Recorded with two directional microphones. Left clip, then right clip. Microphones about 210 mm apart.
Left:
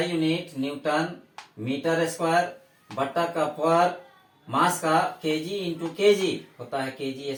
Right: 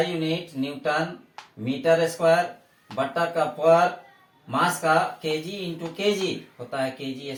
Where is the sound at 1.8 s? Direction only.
15° left (ahead or behind).